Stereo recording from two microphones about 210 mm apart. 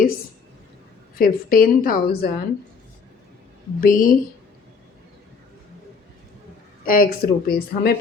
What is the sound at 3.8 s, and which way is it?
Speech, 40° left (ahead or behind).